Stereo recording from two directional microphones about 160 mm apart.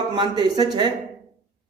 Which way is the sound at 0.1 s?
25° right (ahead or behind).